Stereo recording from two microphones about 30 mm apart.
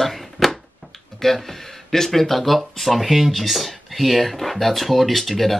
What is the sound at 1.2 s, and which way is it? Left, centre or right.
Speech, centre.